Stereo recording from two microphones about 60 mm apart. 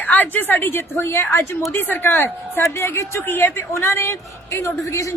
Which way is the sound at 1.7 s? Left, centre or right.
Left.